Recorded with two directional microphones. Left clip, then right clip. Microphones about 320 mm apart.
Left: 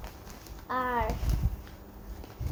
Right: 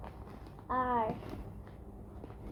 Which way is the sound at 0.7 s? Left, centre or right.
Centre.